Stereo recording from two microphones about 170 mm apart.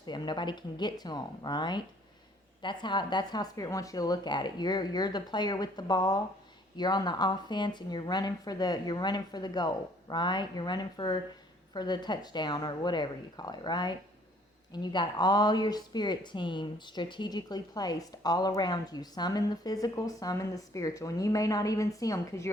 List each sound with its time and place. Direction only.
0.0 s speech: 25° left (ahead or behind)